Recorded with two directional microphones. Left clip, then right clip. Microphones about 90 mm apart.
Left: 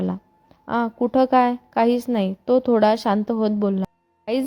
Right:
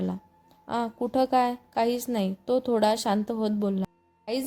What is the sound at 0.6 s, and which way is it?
A woman's voice, 45° left (ahead or behind).